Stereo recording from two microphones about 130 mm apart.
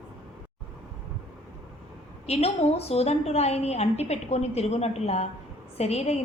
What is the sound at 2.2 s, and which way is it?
A woman's voice, 50° left (ahead or behind).